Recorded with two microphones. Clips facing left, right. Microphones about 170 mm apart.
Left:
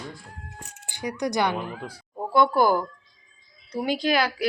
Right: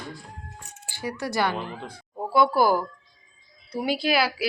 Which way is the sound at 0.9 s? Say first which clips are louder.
Left 3 dB; 15° left (ahead or behind).